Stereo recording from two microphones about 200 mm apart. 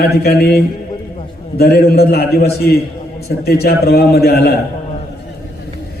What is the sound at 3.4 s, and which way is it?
A man's voice, 50° left (ahead or behind).